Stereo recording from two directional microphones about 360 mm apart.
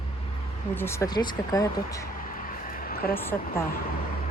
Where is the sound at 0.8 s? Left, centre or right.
Centre.